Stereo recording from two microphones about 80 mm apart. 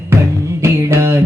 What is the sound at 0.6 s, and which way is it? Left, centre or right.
Music, right.